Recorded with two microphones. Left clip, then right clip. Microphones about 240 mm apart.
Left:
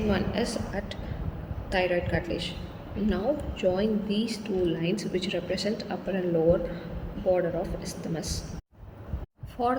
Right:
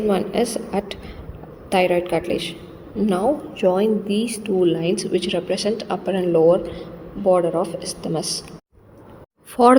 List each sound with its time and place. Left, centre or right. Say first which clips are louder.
0.1 s a woman's voice: right 8 dB; right
9.6 s speech: right 14 dB; right